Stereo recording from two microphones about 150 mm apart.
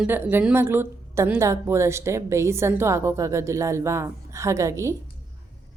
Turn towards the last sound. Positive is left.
turn(degrees=-20)  # may be behind; listen again after turning